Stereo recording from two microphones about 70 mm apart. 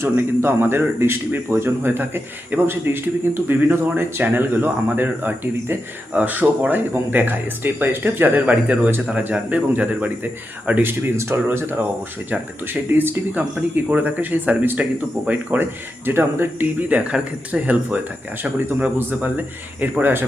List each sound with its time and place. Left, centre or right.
0.0 s speech: right
12.9 s speech: right
16.9 s speech: centre
18.8 s speech: right